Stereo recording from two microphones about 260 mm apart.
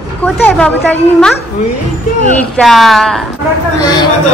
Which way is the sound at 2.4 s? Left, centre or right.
Centre.